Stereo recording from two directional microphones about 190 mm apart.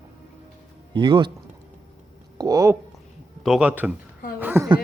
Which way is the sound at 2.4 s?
20° right (ahead or behind).